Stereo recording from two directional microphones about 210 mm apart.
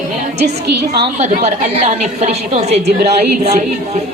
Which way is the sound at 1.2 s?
30° right (ahead or behind).